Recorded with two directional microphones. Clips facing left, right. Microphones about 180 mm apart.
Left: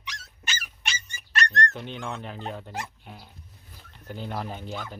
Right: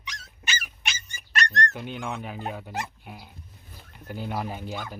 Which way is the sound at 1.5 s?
10° right (ahead or behind).